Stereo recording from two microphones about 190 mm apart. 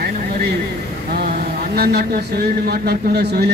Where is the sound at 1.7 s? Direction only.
55° right (ahead or behind).